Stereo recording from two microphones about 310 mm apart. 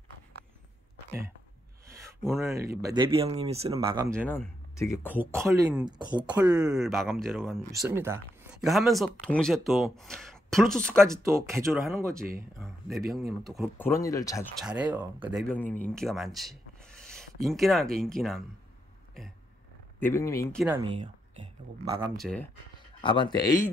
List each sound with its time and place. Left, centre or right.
1.9 s a sound: centre
2.8 s speech: centre
4.2 s speech: centre
5.1 s speech: centre
11.0 s speech: centre
13.0 s speech: right
13.5 s speech: centre
14.6 s speech: centre
15.2 s rub: centre
17.9 s speech: centre
20.0 s speech: centre
20.6 s speech: centre
22.1 s speech: centre
23.0 s speech: centre